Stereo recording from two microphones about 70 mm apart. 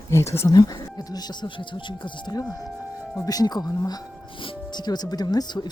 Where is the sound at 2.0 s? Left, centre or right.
Left.